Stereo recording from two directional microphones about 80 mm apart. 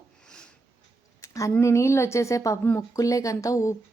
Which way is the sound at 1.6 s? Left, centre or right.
Left.